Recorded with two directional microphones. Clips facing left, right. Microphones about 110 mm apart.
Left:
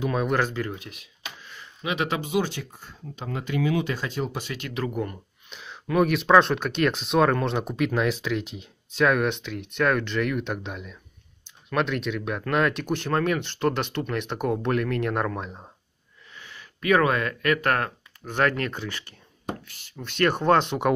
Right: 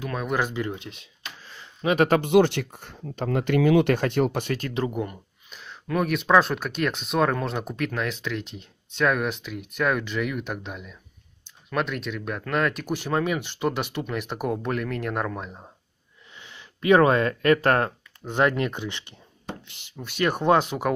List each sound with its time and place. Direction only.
0.0 s speech: 10° left (ahead or behind)
0.3 s speech: 15° right (ahead or behind); by 4.6 s 55° right (ahead or behind)
4.9 s speech: 10° right (ahead or behind)
5.6 s speech: 5° left (ahead or behind)
16.3 s speech: 25° right (ahead or behind); by 20.9 s 5° right (ahead or behind)